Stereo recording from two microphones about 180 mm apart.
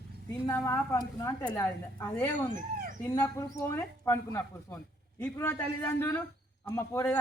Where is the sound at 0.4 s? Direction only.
15° left (ahead or behind).